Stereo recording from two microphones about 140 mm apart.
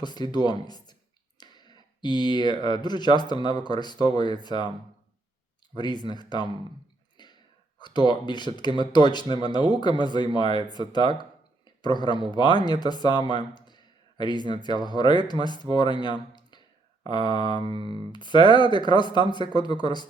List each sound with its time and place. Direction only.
0.0 s speech: 30° left (ahead or behind)
5.7 s speech: 30° left (ahead or behind)
7.2 s a sound: 30° left (ahead or behind)
7.8 s speech: 30° left (ahead or behind)
16.3 s a sound: 30° left (ahead or behind)
17.1 s speech: 30° left (ahead or behind)
17.7 s speech: 40° right (ahead or behind)
18.1 s speech: 30° left (ahead or behind)